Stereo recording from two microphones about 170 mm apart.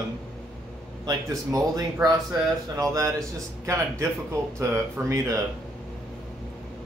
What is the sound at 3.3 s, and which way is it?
Speech, 15° right (ahead or behind).